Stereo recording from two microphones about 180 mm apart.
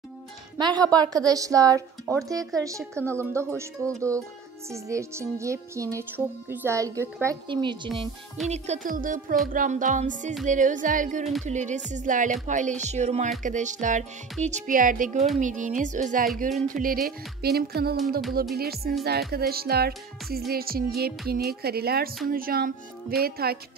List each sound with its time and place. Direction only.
0.6 s a woman's voice: 25° right (ahead or behind)
2.8 s a woman's voice: 5° left (ahead or behind)
3.2 s music: 15° right (ahead or behind)
4.6 s music: 15° right (ahead or behind)
7.4 s a woman's voice: 25° right (ahead or behind)
8.5 s speech: 40° right (ahead or behind)
16.8 s speech: 55° right (ahead or behind)